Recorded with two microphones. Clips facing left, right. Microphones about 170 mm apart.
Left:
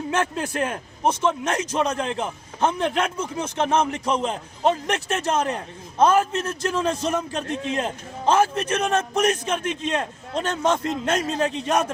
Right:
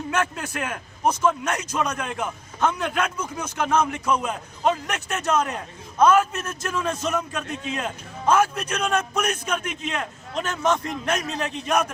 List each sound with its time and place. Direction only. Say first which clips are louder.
0.1 s a man's voice: left 2 dB; 30° left (ahead or behind)